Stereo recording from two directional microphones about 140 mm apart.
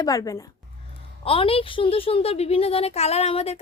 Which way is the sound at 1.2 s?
40° left (ahead or behind).